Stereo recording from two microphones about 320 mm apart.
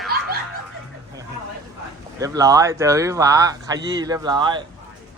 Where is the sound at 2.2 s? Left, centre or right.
Centre.